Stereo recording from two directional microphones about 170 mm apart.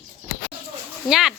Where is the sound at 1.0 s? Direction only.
Centre (ahead or behind).